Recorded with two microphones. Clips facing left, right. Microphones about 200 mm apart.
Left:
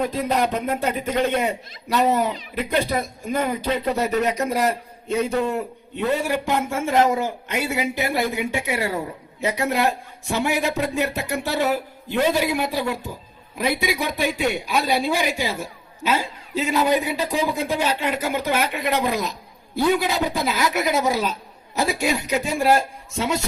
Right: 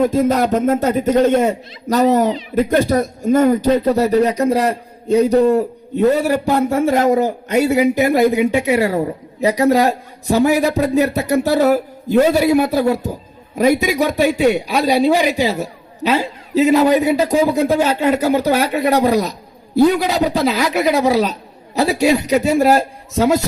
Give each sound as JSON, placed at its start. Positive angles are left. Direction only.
{"t": 0.0, "sound": "a man's voice", "side_deg": -45}